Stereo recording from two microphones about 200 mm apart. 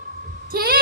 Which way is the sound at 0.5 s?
50° right (ahead or behind).